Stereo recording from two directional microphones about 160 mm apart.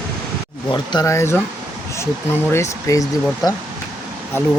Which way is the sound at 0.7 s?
25° left (ahead or behind).